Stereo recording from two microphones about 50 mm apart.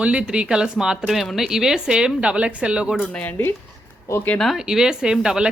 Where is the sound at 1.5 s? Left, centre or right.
Centre.